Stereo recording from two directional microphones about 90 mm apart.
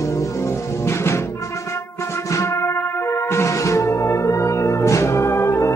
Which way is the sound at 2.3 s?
35° left (ahead or behind).